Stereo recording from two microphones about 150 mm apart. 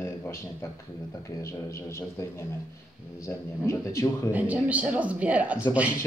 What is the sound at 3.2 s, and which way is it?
Speech, 20° left (ahead or behind).